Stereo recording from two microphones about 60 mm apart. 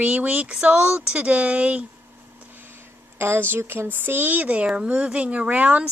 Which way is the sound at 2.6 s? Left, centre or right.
Right.